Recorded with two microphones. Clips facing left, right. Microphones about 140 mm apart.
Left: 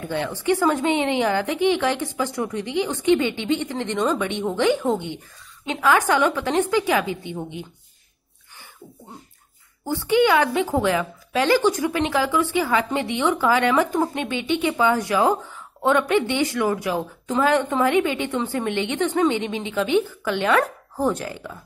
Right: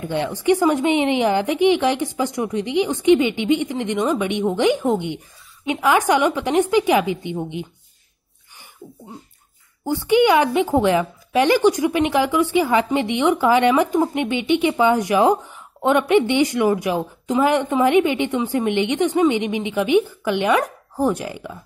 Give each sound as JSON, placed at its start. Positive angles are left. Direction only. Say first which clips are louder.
{"t": 0.1, "sound": "a woman's voice", "louder": "right 4 dB", "side_deg": -15}
{"t": 9.8, "sound": "a woman's voice", "louder": "right 3 dB", "side_deg": -15}